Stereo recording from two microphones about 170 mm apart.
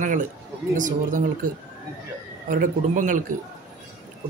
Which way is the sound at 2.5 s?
50° right (ahead or behind).